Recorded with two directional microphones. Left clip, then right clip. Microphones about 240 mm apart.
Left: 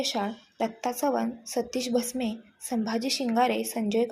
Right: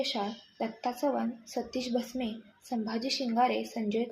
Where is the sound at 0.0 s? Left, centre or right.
Left.